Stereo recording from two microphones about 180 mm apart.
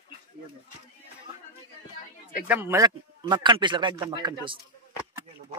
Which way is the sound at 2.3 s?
10° right (ahead or behind).